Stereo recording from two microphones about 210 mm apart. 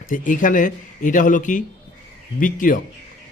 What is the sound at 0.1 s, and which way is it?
Speech, 40° left (ahead or behind).